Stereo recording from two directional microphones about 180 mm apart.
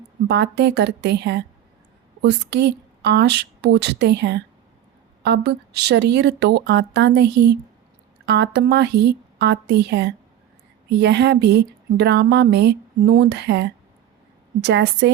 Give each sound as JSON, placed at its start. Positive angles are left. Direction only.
{"t": 0.3, "sound": "speech", "side_deg": -70}